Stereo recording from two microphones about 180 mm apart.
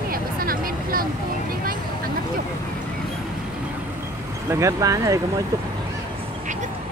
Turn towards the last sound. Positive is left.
turn(degrees=-20)  # may be behind; listen again after turning